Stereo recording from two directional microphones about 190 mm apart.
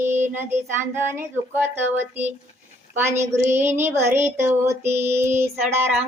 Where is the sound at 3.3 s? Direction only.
10° right (ahead or behind).